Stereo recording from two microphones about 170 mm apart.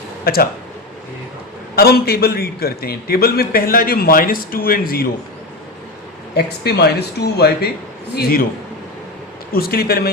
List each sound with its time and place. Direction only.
0.3 s a man's voice: 65° left (ahead or behind)
1.7 s a man's voice: 65° left (ahead or behind)
6.3 s a man's voice: 70° left (ahead or behind)
9.5 s a man's voice: 65° left (ahead or behind)